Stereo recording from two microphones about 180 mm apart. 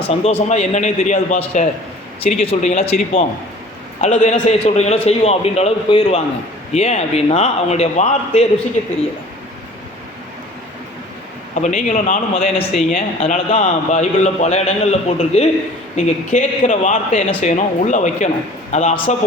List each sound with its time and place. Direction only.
0.1 s a man's voice: 35° left (ahead or behind)
11.6 s a man's voice: 40° left (ahead or behind)